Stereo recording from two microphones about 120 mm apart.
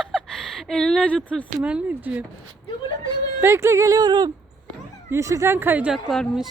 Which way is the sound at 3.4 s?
20° right (ahead or behind).